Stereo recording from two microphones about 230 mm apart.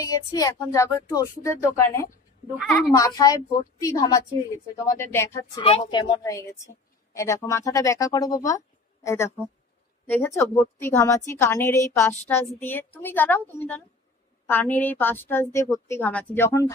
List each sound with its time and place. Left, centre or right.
0.0 s a woman's voice: centre
2.5 s a woman's voice: centre
3.0 s a woman's voice: centre